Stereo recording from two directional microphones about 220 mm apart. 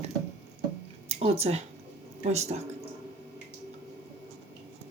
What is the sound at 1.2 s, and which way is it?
Speech, 30° right (ahead or behind).